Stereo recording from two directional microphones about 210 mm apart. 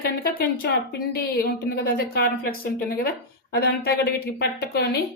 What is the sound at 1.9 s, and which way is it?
Speech, 45° left (ahead or behind).